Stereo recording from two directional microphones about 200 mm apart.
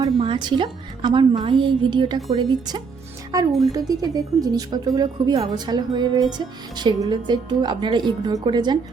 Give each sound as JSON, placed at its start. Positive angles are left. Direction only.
{"t": 0.2, "sound": "speech", "side_deg": -25}